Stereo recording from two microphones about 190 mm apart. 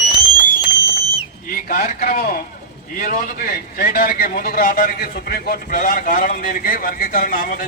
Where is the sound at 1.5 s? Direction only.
50° left (ahead or behind).